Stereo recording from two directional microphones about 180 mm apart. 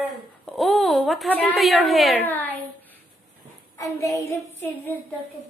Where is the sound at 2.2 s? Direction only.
10° left (ahead or behind).